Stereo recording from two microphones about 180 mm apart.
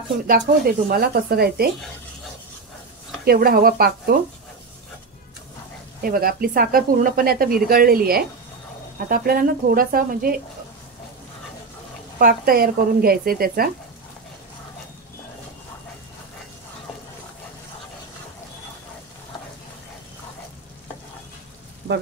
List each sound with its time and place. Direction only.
0.3 s speech: 55° right (ahead or behind)
3.3 s speech: 55° right (ahead or behind)
6.0 s speech: 55° right (ahead or behind)
12.2 s speech: 55° right (ahead or behind)